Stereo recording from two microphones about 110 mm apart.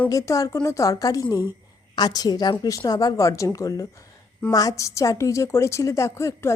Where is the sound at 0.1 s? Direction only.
30° left (ahead or behind).